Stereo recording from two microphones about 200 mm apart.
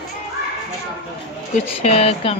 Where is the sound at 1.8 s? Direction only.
30° left (ahead or behind).